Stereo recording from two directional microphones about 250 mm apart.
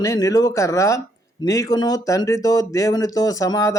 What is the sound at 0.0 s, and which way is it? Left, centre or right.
A man's voice, centre.